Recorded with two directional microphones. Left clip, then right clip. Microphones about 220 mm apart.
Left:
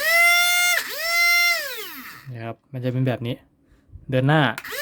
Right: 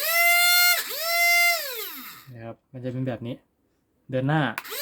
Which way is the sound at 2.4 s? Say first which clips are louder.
Left 7 dB; 40° left (ahead or behind).